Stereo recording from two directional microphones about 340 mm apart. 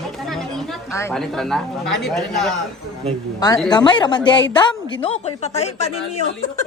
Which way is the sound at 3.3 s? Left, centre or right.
Centre.